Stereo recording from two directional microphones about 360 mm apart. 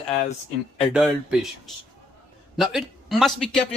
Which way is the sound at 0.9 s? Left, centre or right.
Centre.